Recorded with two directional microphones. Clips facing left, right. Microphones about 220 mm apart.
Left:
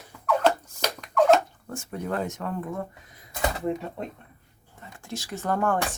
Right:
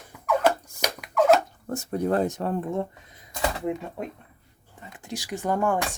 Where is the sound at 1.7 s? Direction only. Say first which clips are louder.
Right 6 dB; 40° right (ahead or behind).